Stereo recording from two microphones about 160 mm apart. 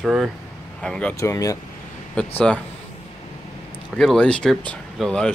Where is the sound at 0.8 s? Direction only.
10° left (ahead or behind).